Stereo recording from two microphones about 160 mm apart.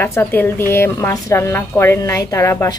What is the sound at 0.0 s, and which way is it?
A woman's voice, 15° left (ahead or behind).